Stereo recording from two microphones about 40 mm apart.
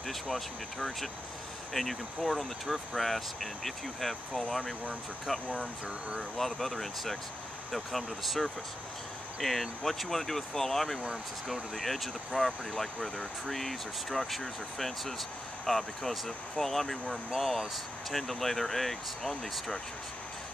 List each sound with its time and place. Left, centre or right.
0.0 s speech: centre
5.5 s speech: right
6.3 s speech: centre